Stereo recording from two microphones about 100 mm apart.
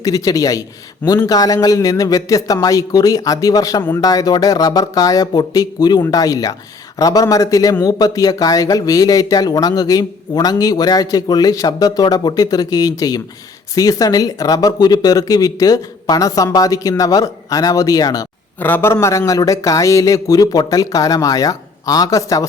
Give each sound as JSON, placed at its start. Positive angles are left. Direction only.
{"t": 0.0, "sound": "a man's voice", "side_deg": 35}
{"t": 18.6, "sound": "a man's voice", "side_deg": 20}